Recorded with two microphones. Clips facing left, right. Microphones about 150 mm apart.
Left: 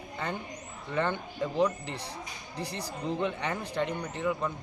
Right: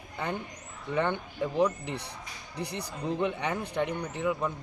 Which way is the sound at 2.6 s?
65° right (ahead or behind).